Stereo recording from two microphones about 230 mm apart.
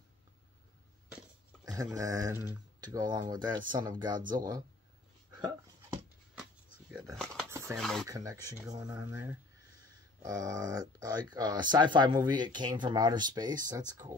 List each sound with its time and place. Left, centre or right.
2.0 s speech: centre
4.2 s speech: right
7.4 s a sound: centre
7.7 s speech: centre
8.1 s speech: centre